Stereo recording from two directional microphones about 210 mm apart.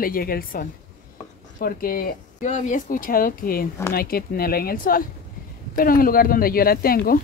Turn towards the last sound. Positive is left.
turn(degrees=45)  # may be behind; listen again after turning